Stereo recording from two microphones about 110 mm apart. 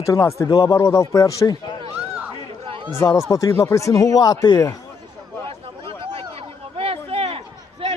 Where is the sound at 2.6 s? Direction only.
50° right (ahead or behind).